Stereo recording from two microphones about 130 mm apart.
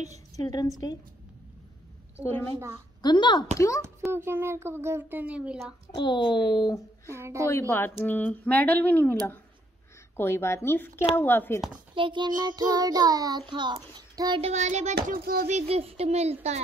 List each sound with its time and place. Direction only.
0.4 s a woman's voice: 30° left (ahead or behind)
2.2 s speech: 15° left (ahead or behind)
3.0 s speech: 35° left (ahead or behind)
3.5 s a woman's voice: 25° left (ahead or behind)
4.1 s a child's voice: 20° right (ahead or behind)
5.9 s speech: 35° left (ahead or behind)
7.1 s child singing: 20° right (ahead or behind)
8.0 s speech: 10° left (ahead or behind)
11.9 s child singing: 40° right (ahead or behind)
13.5 s a child's voice: 35° right (ahead or behind)
14.4 s a sound: 65° right (ahead or behind)